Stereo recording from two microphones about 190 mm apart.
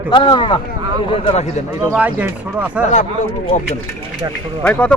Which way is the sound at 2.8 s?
40° left (ahead or behind).